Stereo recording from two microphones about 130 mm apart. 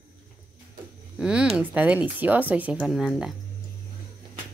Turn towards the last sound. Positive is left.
turn(degrees=-5)  # may be behind; listen again after turning